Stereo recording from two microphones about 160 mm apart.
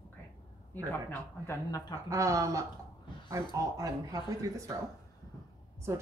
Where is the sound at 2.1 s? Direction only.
20° right (ahead or behind).